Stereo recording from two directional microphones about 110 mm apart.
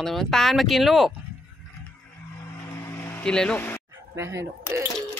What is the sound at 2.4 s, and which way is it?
Vehicle, 25° left (ahead or behind).